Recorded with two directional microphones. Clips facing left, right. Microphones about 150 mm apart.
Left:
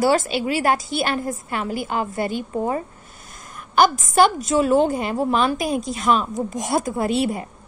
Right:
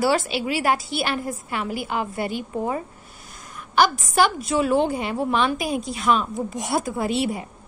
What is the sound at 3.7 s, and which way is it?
A woman's voice, 45° left (ahead or behind).